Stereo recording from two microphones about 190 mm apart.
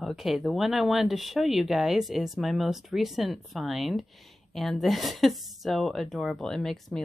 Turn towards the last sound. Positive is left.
turn(degrees=0)  # may be behind; listen again after turning